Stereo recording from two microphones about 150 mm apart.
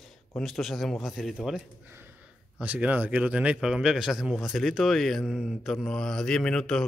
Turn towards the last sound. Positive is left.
turn(degrees=5)  # may be behind; listen again after turning